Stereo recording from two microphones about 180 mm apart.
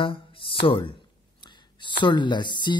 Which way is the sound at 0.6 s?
30° left (ahead or behind).